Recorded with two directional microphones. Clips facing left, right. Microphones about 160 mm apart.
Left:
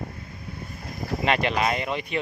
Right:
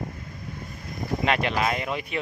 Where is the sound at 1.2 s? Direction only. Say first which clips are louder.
Left 1 dB; centre (ahead or behind).